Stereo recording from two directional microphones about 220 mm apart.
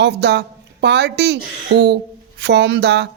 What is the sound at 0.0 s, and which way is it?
A man's voice, 50° right (ahead or behind).